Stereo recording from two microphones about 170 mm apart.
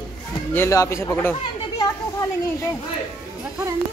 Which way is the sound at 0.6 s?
15° left (ahead or behind).